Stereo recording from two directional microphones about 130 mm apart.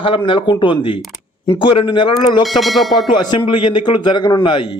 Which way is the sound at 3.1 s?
35° left (ahead or behind).